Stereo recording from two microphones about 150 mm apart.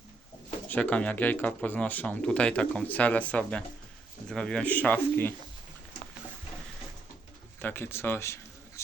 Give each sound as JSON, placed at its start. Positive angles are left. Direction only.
{"t": 0.7, "sound": "speech", "side_deg": 10}
{"t": 7.6, "sound": "speech", "side_deg": 15}